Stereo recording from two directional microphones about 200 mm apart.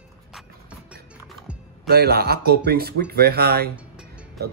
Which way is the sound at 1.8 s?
50° right (ahead or behind).